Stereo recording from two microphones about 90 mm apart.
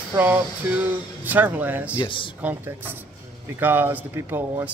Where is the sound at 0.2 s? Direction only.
20° right (ahead or behind).